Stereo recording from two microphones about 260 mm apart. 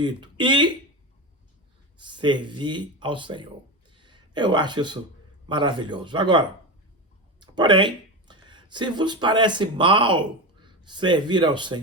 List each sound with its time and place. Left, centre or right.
0.0 s speech: centre
2.0 s speech: centre
3.9 s a sound: centre
5.5 s speech: centre